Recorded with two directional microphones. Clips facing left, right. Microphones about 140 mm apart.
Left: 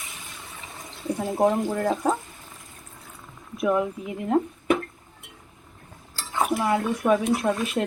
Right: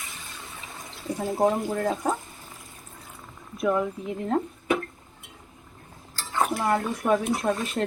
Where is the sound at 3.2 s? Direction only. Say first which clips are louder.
Left 2 dB; centre (ahead or behind).